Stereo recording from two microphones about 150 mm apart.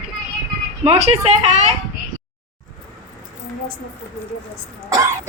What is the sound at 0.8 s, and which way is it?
Speech, 45° right (ahead or behind).